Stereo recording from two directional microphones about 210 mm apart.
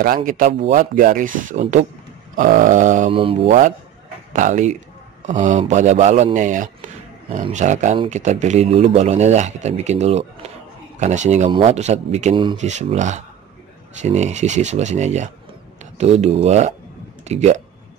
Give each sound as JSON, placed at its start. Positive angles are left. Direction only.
{"t": 0.0, "sound": "speech", "side_deg": -40}
{"t": 4.3, "sound": "speech", "side_deg": -35}